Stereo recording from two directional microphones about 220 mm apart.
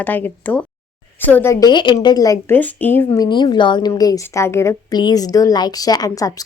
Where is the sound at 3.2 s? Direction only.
20° left (ahead or behind).